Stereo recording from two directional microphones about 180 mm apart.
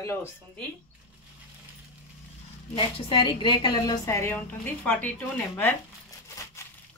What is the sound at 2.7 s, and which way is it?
A woman's voice, 30° left (ahead or behind).